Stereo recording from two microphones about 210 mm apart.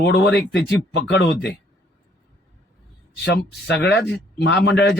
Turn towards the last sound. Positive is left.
turn(degrees=55)  # may be behind; listen again after turning